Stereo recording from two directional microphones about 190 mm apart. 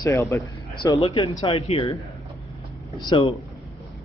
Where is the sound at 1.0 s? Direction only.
30° left (ahead or behind).